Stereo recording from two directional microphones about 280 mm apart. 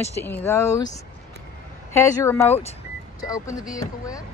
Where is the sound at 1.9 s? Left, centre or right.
Centre.